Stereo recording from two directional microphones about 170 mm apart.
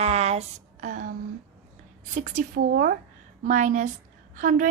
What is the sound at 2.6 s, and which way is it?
Speech, 65° right (ahead or behind).